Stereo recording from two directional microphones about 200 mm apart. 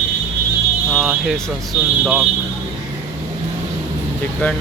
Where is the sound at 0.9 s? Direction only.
Centre (ahead or behind).